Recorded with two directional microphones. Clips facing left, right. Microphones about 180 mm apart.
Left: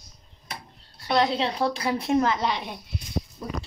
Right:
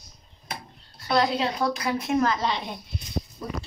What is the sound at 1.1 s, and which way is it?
A woman's voice, 30° left (ahead or behind).